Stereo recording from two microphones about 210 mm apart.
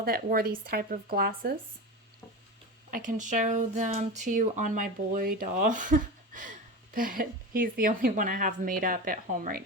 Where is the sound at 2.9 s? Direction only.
35° right (ahead or behind).